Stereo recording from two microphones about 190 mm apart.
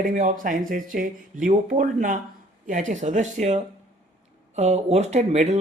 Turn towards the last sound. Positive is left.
turn(degrees=-35)  # may be behind; listen again after turning